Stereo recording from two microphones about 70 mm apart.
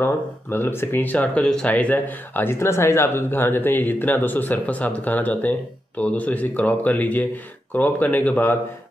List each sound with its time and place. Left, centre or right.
0.0 s speech: left
2.5 s speech: left